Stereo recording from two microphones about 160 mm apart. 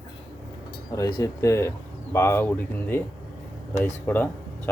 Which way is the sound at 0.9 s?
20° left (ahead or behind).